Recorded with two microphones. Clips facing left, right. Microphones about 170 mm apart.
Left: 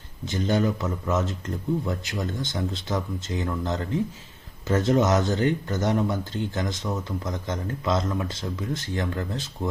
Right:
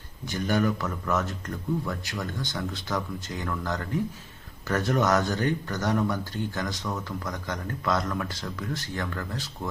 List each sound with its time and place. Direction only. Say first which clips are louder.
0.3 s speech: left 2 dB; 20° left (ahead or behind)